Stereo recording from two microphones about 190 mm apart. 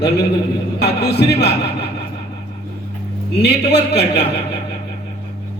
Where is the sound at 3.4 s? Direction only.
60° left (ahead or behind).